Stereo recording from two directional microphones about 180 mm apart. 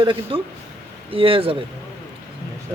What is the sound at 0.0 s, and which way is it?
A man's voice, 30° right (ahead or behind).